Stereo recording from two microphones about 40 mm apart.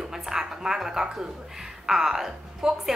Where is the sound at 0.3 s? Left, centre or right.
Centre.